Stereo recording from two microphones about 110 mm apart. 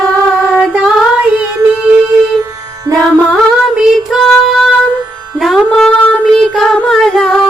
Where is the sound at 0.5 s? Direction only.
10° right (ahead or behind).